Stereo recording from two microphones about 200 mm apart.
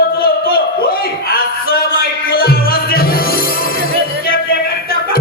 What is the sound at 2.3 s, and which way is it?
Music, 50° left (ahead or behind).